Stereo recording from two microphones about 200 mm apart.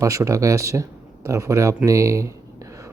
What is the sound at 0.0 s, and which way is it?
A man's voice, 15° right (ahead or behind).